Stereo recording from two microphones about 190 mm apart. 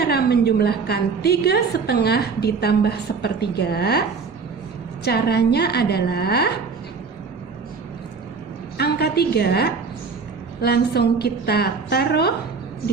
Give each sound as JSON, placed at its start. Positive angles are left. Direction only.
{"t": 0.0, "sound": "a woman's voice", "side_deg": 60}
{"t": 5.0, "sound": "a woman's voice", "side_deg": 60}
{"t": 8.8, "sound": "a woman's voice", "side_deg": 55}